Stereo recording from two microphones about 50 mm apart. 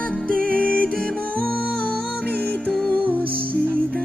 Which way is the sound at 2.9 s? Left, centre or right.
Right.